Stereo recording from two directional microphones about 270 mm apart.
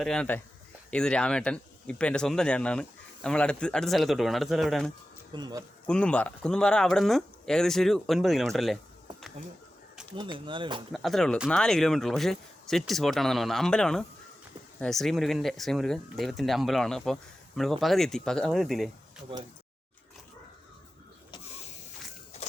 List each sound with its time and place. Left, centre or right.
0.0 s speech: centre
5.3 s speech: centre
5.8 s speech: centre
9.4 s speech: right
10.9 s speech: centre